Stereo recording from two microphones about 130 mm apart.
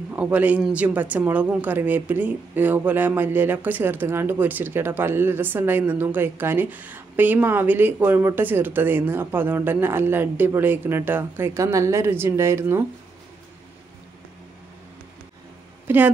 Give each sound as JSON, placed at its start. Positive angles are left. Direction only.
{"t": 0.1, "sound": "speech", "side_deg": -10}
{"t": 15.9, "sound": "speech", "side_deg": -15}